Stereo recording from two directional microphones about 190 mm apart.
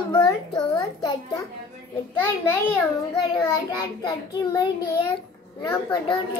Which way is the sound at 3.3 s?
20° left (ahead or behind).